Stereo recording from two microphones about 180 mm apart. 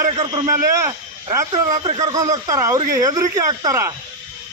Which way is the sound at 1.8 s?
30° right (ahead or behind).